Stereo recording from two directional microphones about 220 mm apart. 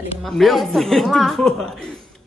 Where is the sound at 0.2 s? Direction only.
Centre (ahead or behind).